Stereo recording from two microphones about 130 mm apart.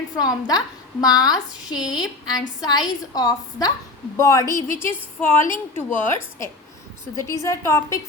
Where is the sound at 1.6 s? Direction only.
5° right (ahead or behind).